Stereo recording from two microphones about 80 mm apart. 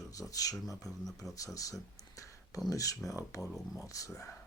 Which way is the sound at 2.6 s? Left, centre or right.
Left.